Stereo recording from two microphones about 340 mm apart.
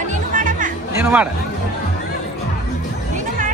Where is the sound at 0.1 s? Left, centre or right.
Right.